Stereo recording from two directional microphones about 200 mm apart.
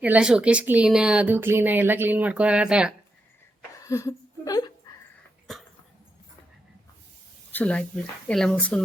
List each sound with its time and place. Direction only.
0.0 s speech: 5° right (ahead or behind)
3.8 s a woman's voice: 15° left (ahead or behind)
7.5 s speech: 5° left (ahead or behind)